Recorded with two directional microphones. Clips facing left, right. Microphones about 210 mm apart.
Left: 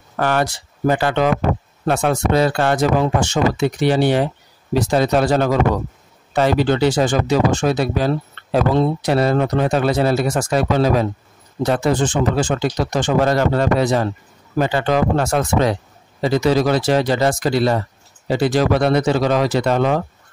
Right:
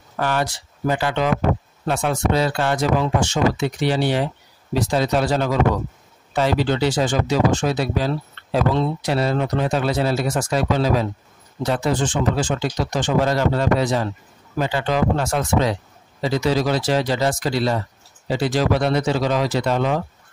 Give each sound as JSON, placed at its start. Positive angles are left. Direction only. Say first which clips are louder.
{"t": 0.2, "sound": "a man's voice", "louder": "left 4 dB", "side_deg": 55}